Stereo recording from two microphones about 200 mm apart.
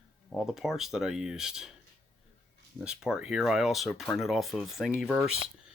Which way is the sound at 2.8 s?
5° right (ahead or behind).